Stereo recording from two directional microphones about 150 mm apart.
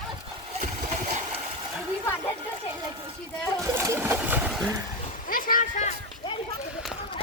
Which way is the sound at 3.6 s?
20° right (ahead or behind).